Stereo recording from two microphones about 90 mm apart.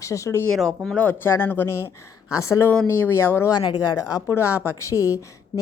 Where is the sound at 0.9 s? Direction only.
20° left (ahead or behind); by 5.6 s 35° left (ahead or behind).